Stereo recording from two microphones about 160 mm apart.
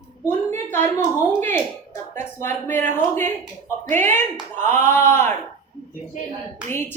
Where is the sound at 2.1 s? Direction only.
15° left (ahead or behind).